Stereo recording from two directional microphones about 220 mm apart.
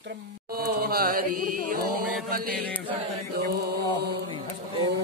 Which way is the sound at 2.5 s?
5° left (ahead or behind).